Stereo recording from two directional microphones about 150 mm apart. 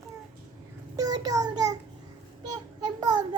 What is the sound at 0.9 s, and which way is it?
Child singing, 25° right (ahead or behind).